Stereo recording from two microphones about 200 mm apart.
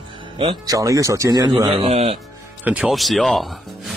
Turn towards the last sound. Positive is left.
turn(degrees=0)  # may be behind; listen again after turning